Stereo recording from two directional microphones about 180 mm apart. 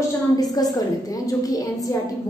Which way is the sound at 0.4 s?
20° left (ahead or behind).